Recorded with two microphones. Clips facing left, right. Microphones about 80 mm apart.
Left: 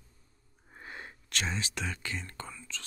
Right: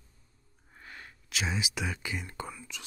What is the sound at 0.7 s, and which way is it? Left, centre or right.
Sniff, left.